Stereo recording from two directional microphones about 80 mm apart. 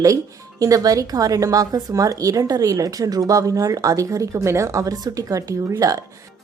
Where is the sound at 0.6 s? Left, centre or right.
Right.